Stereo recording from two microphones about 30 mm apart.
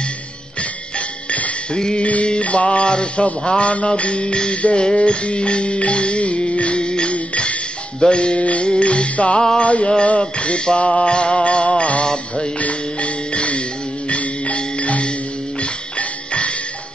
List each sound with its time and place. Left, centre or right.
2.0 s music: left
8.4 s music: left
8.6 s music: left
12.0 s music: left
12.5 s music: left